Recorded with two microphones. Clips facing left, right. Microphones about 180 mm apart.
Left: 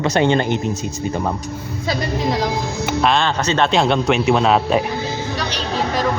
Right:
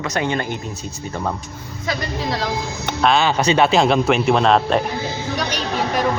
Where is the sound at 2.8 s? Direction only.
Centre (ahead or behind).